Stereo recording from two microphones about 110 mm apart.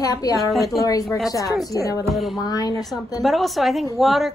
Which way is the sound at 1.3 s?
30° left (ahead or behind).